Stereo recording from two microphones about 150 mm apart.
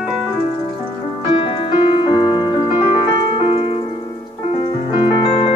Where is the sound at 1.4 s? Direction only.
35° left (ahead or behind).